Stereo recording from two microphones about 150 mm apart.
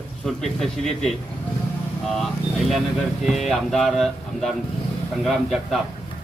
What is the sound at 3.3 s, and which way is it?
A man's voice, centre (ahead or behind).